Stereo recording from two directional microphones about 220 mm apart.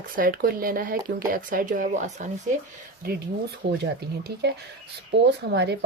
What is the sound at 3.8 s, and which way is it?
Speech, 50° right (ahead or behind).